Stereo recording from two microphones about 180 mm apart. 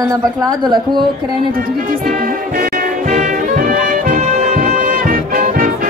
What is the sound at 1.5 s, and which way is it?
Music, 50° right (ahead or behind).